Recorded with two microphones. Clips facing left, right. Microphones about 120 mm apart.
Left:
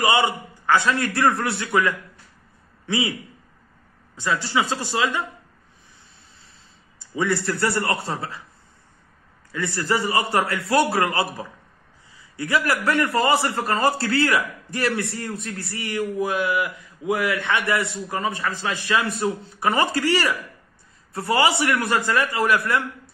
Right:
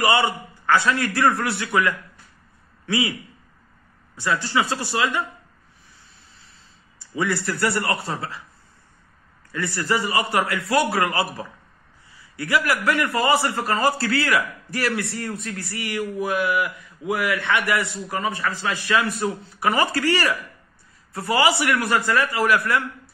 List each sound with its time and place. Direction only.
0.0 s a man's voice: 20° left (ahead or behind)
4.2 s speech: 15° left (ahead or behind)
7.2 s speech: 25° left (ahead or behind)
9.5 s a man's voice: 20° left (ahead or behind)
9.8 s a man's voice: 35° left (ahead or behind)
12.4 s speech: 25° left (ahead or behind)